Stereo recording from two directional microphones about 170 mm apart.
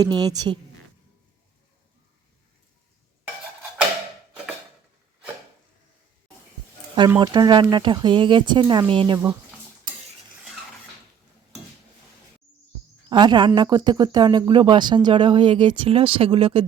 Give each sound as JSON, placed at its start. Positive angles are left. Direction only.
{"t": 0.0, "sound": "speech", "side_deg": -25}
{"t": 7.2, "sound": "speech", "side_deg": -25}
{"t": 13.1, "sound": "speech", "side_deg": -25}